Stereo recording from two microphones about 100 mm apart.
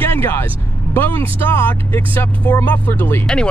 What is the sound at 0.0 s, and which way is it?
Vehicle, 20° left (ahead or behind).